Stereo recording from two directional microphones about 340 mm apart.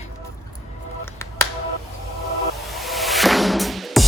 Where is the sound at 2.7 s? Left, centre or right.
Centre.